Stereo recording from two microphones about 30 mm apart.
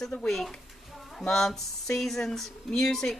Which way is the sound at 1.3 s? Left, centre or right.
Centre.